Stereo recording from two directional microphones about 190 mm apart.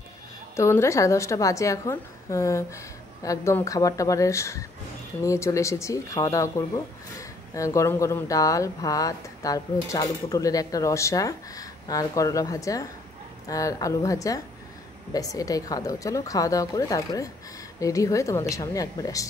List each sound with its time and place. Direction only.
0.6 s speech: 15° left (ahead or behind)